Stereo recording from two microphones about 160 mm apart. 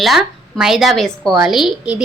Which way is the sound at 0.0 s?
Centre (ahead or behind).